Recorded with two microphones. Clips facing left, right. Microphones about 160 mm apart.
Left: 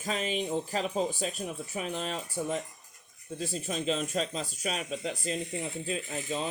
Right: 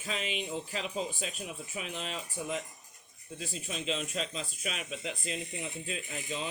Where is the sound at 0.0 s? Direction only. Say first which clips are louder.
Left 5 dB; 40° left (ahead or behind).